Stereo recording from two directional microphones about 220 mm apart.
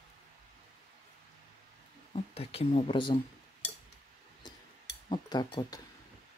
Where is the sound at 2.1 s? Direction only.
25° left (ahead or behind).